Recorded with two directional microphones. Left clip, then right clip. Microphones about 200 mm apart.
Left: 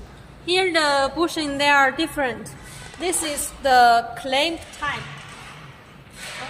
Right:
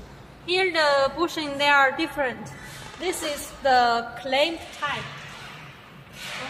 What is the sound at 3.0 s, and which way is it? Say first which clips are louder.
A woman's voice: left 3 dB; 50° left (ahead or behind).